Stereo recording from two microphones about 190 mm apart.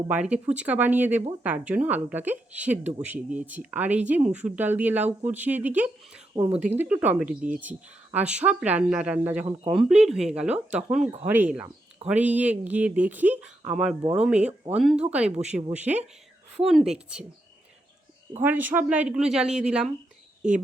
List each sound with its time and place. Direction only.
0.1 s speech: 5° right (ahead or behind)
6.3 s speech: 20° right (ahead or behind)
6.7 s speech: 10° right (ahead or behind)
11.0 s speech: 35° right (ahead or behind)
11.3 s speech: 10° right (ahead or behind)
14.0 s speech: 25° right (ahead or behind)
14.3 s speech: 5° right (ahead or behind)
18.3 s speech: 10° right (ahead or behind)